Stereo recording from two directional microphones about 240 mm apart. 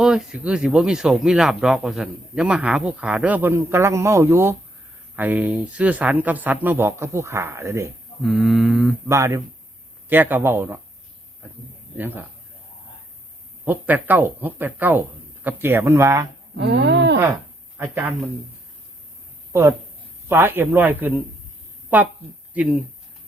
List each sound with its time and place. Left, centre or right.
0.0 s speech: centre
8.2 s speech: centre
9.0 s speech: centre
11.9 s speech: centre
13.7 s speech: centre
16.6 s a sound: right
17.2 s a sound: centre
17.8 s speech: centre
20.2 s speech: centre
22.5 s speech: centre